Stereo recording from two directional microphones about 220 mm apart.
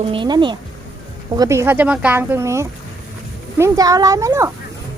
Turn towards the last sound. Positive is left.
turn(degrees=-15)  # may be behind; listen again after turning